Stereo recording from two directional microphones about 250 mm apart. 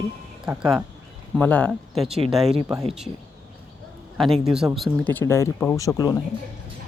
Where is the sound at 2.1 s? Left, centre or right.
Right.